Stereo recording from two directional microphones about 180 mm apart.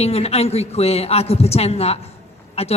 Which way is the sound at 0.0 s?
35° left (ahead or behind).